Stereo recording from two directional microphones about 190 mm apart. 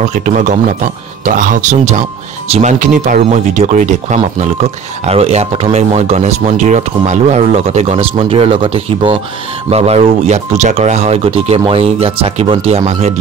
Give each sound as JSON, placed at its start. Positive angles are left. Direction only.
{"t": 0.1, "sound": "speech", "side_deg": -40}